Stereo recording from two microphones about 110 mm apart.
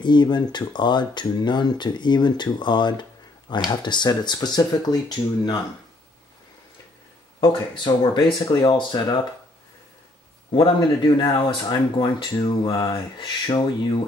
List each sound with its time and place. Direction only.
0.0 s speech: 45° left (ahead or behind)
7.3 s speech: 45° left (ahead or behind)
10.5 s speech: 45° left (ahead or behind)
12.6 s speech: 35° left (ahead or behind)